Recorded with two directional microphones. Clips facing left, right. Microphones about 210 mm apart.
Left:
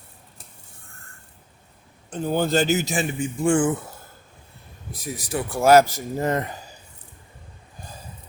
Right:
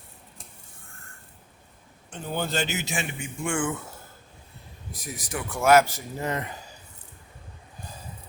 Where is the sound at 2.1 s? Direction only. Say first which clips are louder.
Left 8 dB; 40° left (ahead or behind).